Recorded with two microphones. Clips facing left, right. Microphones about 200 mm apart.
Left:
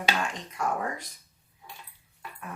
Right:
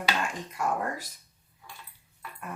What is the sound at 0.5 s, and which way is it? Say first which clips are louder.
Speech: even; 5° right (ahead or behind).